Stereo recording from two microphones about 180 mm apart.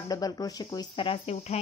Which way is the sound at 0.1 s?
20° left (ahead or behind).